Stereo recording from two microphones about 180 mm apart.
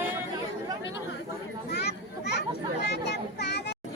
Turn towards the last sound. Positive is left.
turn(degrees=70)  # may be behind; listen again after turning